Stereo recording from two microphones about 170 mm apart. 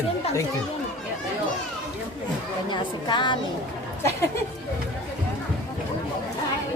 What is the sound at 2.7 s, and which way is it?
Speech, 25° left (ahead or behind).